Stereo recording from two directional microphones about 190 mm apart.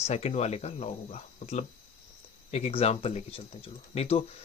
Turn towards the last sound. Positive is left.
turn(degrees=30)  # may be behind; listen again after turning